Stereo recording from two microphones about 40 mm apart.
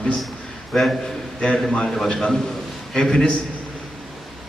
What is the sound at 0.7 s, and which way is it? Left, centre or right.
Speech, centre.